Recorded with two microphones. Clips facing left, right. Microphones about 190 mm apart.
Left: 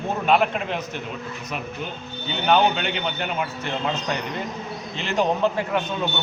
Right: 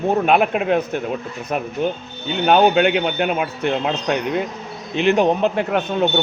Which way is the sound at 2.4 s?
55° right (ahead or behind).